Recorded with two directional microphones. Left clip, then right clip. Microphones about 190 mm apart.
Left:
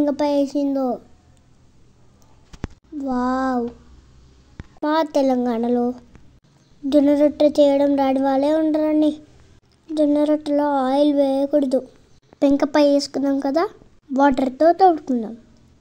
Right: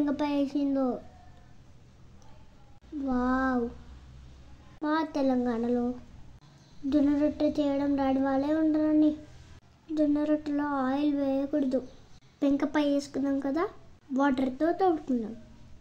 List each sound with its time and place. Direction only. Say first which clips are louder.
0.0 s speech: left 10 dB; 35° left (ahead or behind)
3.1 s speech: left 7 dB; 35° left (ahead or behind)
4.8 s speech: left 10 dB; 40° left (ahead or behind)
6.9 s speech: left 11 dB; 40° left (ahead or behind)